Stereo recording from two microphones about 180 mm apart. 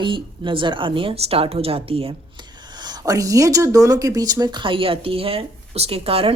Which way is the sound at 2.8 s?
20° right (ahead or behind).